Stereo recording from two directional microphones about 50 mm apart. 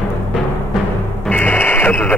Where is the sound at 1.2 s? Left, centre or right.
Left.